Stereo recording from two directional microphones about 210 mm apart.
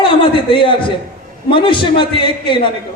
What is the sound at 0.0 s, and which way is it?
Chuckle, 25° left (ahead or behind).